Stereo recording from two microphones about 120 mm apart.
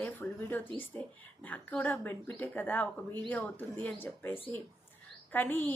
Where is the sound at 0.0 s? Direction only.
15° left (ahead or behind).